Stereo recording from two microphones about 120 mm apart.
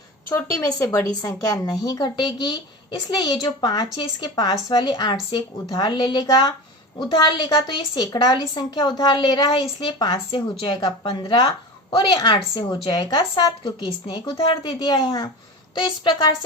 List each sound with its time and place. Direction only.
0.3 s a woman's voice: 25° left (ahead or behind)